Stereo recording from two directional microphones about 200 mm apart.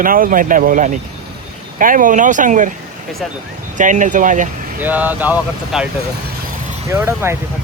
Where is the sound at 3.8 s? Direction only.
40° right (ahead or behind).